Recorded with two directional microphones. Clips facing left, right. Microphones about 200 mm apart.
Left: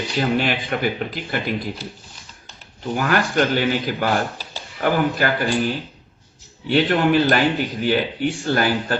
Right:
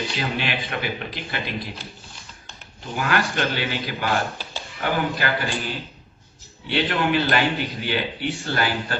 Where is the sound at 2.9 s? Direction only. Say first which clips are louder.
Left 4 dB; 45° left (ahead or behind).